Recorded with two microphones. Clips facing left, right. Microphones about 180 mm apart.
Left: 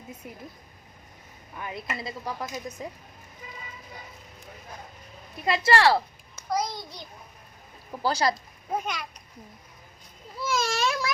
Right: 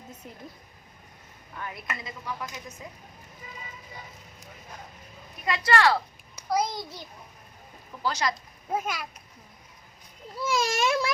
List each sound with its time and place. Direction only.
0.2 s speech: 10° left (ahead or behind)
1.5 s speech: 15° left (ahead or behind)
2.0 s speech: 35° left (ahead or behind)
5.5 s speech: 30° left (ahead or behind)
6.5 s a child's voice: 5° right (ahead or behind)
8.0 s speech: 35° left (ahead or behind)
8.7 s a child's voice: 5° right (ahead or behind)
10.4 s a child's voice: 15° right (ahead or behind)